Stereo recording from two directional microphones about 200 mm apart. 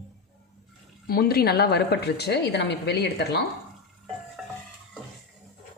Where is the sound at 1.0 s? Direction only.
50° left (ahead or behind).